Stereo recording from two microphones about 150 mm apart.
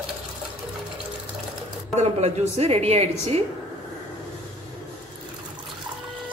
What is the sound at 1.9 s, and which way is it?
Speech, 45° right (ahead or behind).